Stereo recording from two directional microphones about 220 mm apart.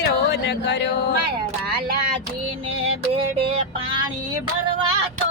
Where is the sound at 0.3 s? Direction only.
50° left (ahead or behind).